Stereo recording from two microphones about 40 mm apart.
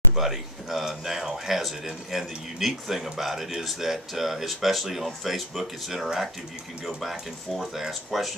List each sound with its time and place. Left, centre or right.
0.1 s speech: centre